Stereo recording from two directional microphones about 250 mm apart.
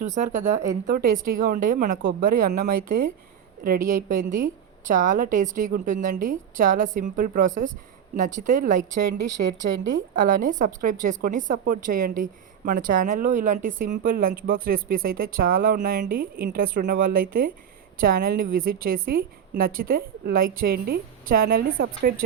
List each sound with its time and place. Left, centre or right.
0.0 s a woman's voice: right
4.1 s a woman's voice: right
9.0 s a woman's voice: right
10.2 s a woman's voice: right